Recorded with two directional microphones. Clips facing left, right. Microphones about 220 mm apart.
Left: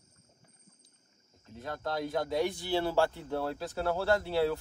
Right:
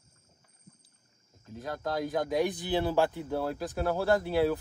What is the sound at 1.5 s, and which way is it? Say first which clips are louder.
Speech: right 2 dB; 15° right (ahead or behind).